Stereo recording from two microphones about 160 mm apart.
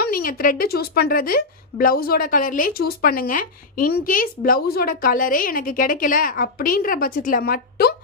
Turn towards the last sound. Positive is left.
turn(degrees=70)  # may be behind; listen again after turning